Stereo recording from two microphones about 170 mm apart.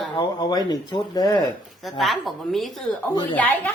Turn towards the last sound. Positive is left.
turn(degrees=10)  # may be behind; listen again after turning